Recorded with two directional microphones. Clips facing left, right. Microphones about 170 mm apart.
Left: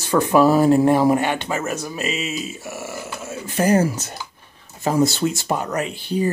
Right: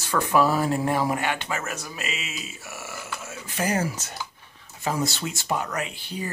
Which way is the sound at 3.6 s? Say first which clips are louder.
Left 8 dB; 40° left (ahead or behind).